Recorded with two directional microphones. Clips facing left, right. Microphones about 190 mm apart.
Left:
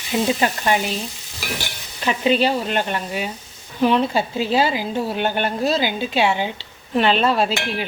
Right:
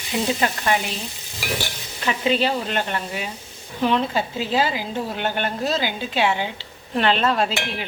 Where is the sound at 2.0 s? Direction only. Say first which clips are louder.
Left 3 dB; 15° left (ahead or behind).